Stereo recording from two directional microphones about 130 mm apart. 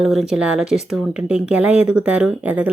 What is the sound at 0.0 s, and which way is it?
A woman's voice, 5° right (ahead or behind).